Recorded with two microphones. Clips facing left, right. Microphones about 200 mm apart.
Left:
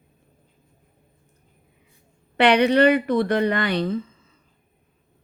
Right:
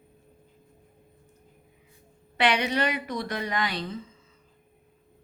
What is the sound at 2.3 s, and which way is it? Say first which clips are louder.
Speech: left 9 dB; 60° left (ahead or behind).